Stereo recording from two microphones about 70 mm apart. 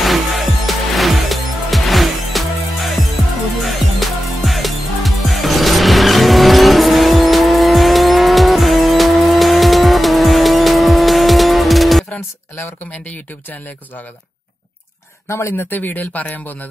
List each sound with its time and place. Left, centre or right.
0.0 s music: centre
12.5 s speech: left
13.0 s a man's voice: left
15.2 s a man's voice: left